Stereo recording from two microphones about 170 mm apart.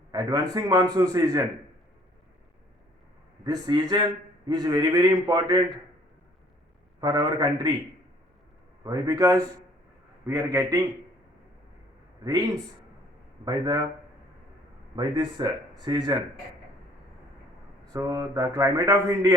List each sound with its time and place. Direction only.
0.1 s a man's voice: 25° right (ahead or behind)
3.4 s a man's voice: 25° right (ahead or behind)
7.0 s a man's voice: 25° right (ahead or behind)
8.8 s a man's voice: 20° right (ahead or behind)
13.4 s a man's voice: 25° right (ahead or behind)
14.9 s a man's voice: 25° right (ahead or behind)
17.9 s a man's voice: 20° right (ahead or behind)